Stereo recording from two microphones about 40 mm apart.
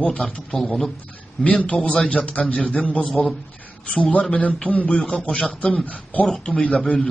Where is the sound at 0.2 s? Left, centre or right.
Left.